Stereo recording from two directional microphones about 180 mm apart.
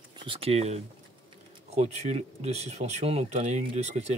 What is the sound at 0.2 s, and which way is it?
Speech, 30° right (ahead or behind).